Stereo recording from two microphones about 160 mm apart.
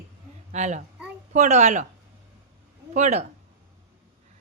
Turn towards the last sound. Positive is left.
turn(degrees=-45)  # may be behind; listen again after turning